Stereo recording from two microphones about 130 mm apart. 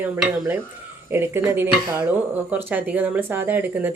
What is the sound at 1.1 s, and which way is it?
Speech, 20° right (ahead or behind).